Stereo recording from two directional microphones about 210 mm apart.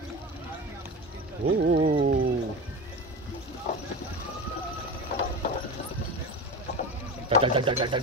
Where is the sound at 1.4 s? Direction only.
45° right (ahead or behind).